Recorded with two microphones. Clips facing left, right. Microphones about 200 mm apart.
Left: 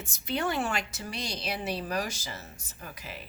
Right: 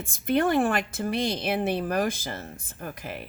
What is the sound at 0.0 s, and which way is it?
Speech, 50° right (ahead or behind).